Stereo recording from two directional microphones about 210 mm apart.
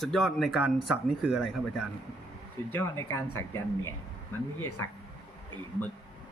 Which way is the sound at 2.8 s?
10° left (ahead or behind).